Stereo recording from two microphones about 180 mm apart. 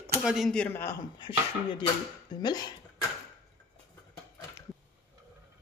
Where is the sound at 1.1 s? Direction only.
25° left (ahead or behind).